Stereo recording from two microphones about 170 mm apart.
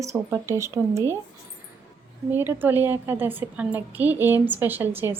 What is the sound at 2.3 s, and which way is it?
Speech, 10° right (ahead or behind).